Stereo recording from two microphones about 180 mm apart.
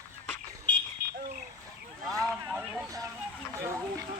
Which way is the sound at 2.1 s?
20° right (ahead or behind).